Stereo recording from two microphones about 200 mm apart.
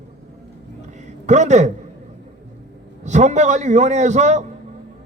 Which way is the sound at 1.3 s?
35° right (ahead or behind).